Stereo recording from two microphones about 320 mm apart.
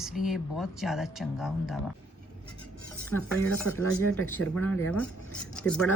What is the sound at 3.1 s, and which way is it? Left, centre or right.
Speech, centre.